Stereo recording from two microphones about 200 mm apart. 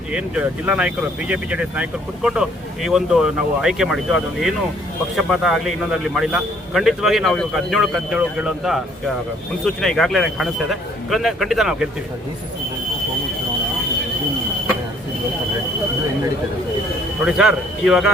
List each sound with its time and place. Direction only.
0.1 s speech: 5° right (ahead or behind)
17.2 s speech: 5° right (ahead or behind)